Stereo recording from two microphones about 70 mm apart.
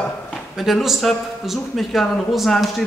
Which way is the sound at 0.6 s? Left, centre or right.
Centre.